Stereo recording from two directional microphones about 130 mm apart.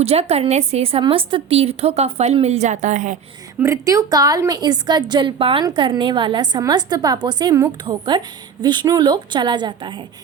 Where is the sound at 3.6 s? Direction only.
25° right (ahead or behind).